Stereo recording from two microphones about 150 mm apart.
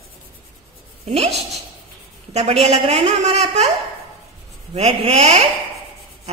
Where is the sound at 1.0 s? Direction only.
45° right (ahead or behind).